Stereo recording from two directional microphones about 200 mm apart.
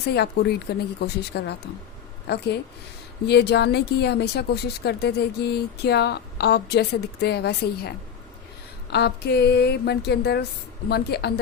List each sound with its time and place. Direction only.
0.1 s speech: 55° left (ahead or behind)